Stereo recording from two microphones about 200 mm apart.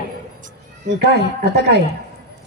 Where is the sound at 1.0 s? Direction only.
55° right (ahead or behind).